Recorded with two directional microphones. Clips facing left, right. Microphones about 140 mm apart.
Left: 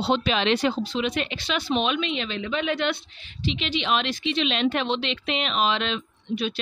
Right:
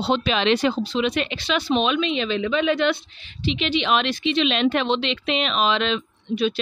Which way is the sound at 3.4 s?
70° right (ahead or behind).